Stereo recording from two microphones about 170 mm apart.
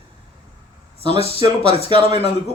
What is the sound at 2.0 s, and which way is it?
Speech, 35° left (ahead or behind).